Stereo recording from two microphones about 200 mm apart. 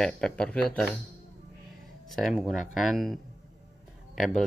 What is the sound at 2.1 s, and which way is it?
Speech, centre (ahead or behind).